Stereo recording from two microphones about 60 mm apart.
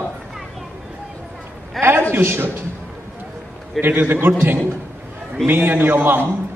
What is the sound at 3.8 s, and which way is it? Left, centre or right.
A man's voice, right.